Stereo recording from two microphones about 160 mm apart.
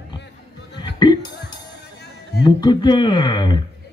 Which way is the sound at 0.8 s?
25° left (ahead or behind).